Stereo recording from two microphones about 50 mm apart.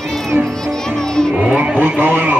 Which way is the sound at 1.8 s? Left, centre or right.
Right.